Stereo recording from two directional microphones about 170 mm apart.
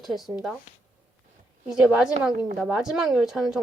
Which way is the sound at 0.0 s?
Centre (ahead or behind).